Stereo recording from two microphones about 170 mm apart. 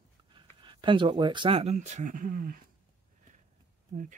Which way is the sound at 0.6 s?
30° right (ahead or behind).